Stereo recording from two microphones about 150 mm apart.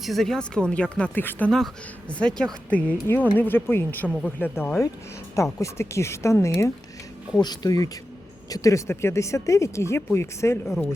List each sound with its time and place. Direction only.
0.0 s speech: centre (ahead or behind); by 10.6 s 15° left (ahead or behind)